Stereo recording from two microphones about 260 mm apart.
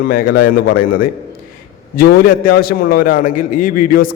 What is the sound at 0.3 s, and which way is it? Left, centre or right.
Speech, left.